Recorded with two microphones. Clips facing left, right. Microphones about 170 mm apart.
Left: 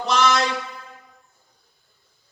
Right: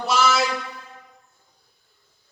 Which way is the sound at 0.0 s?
5° right (ahead or behind).